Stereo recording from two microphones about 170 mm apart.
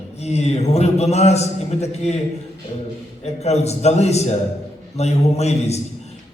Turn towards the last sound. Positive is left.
turn(degrees=40)  # may be behind; listen again after turning